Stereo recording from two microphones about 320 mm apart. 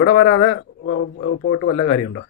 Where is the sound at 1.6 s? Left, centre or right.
Left.